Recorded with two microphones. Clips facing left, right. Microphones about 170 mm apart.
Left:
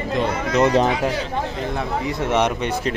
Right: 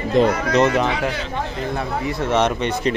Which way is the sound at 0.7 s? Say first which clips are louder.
Left 2 dB; 40° left (ahead or behind).